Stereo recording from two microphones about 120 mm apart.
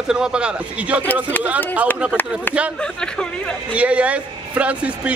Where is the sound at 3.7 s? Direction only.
10° right (ahead or behind).